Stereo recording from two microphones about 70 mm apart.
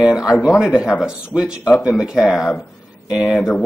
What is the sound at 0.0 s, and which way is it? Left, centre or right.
Speech, centre.